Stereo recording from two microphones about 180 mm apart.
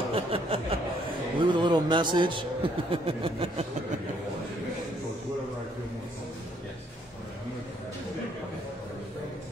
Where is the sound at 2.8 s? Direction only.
30° right (ahead or behind).